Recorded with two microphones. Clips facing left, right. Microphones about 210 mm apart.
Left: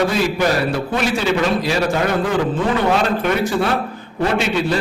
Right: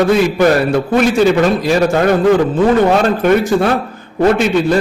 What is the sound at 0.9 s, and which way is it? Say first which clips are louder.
Speech: right 9 dB; 50° right (ahead or behind).